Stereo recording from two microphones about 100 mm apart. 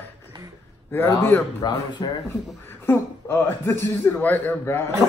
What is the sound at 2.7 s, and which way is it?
Speech, 20° left (ahead or behind).